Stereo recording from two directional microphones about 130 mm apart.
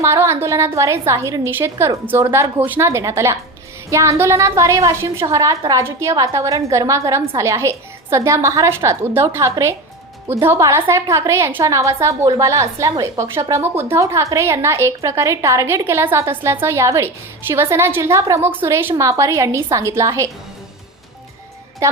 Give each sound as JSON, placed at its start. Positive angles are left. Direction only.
{"t": 0.0, "sound": "a woman's voice", "side_deg": -20}